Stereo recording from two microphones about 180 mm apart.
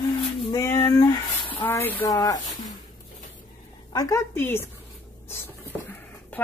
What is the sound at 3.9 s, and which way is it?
Speech, 20° left (ahead or behind).